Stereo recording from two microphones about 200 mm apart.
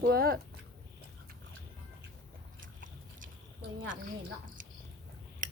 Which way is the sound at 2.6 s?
45° right (ahead or behind).